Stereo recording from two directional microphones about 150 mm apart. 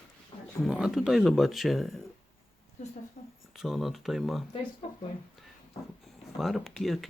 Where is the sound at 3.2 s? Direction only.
40° left (ahead or behind).